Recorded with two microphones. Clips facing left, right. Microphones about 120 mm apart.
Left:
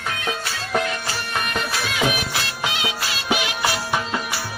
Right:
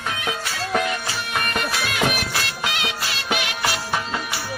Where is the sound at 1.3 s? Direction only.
Centre (ahead or behind).